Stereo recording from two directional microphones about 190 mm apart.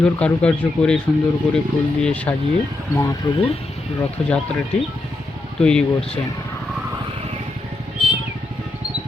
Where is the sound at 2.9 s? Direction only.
15° left (ahead or behind).